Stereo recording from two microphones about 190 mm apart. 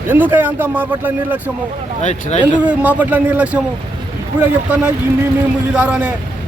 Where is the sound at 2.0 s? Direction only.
40° left (ahead or behind).